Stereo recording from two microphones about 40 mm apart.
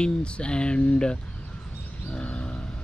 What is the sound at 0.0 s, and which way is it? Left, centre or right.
Speech, left.